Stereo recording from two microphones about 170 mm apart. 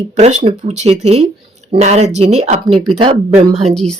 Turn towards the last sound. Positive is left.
turn(degrees=-40)  # may be behind; listen again after turning